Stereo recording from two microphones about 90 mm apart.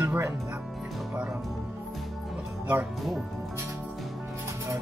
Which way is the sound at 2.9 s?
Centre (ahead or behind).